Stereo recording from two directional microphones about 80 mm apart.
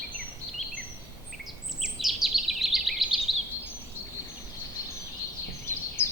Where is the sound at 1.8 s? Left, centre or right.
Centre.